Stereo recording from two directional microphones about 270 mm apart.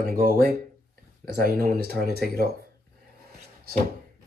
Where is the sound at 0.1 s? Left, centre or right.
Right.